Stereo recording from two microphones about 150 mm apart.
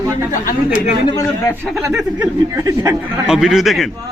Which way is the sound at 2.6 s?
20° right (ahead or behind).